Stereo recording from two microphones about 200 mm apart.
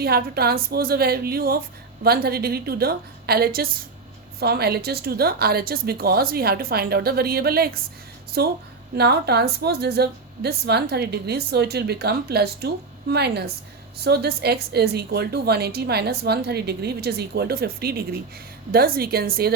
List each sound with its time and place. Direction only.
0.0 s speech: 50° right (ahead or behind)